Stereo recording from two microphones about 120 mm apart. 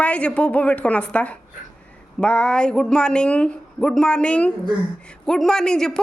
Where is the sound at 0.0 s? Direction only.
10° left (ahead or behind).